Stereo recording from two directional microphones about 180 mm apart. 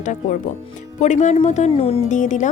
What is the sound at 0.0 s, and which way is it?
A woman's voice, 45° left (ahead or behind).